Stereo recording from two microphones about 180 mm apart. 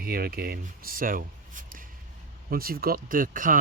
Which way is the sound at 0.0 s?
60° right (ahead or behind).